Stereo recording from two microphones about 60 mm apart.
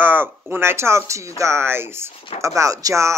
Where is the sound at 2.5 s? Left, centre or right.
Right.